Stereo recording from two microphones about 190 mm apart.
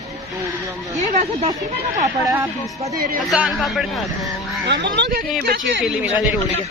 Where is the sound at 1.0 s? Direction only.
40° right (ahead or behind).